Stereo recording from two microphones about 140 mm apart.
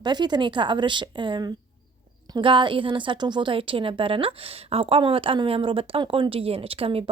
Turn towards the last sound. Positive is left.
turn(degrees=-40)  # may be behind; listen again after turning